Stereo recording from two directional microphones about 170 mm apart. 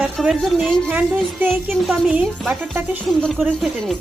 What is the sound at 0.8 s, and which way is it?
Speech, 10° right (ahead or behind).